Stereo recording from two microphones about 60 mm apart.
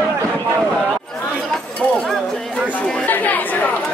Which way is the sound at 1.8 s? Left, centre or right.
Left.